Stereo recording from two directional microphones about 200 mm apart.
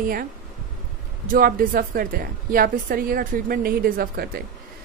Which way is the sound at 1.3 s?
45° right (ahead or behind).